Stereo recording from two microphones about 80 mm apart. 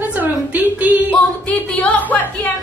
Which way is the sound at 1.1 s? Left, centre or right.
Centre.